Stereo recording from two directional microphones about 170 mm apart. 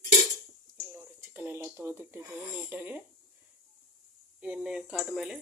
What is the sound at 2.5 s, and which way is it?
Speech, 10° right (ahead or behind).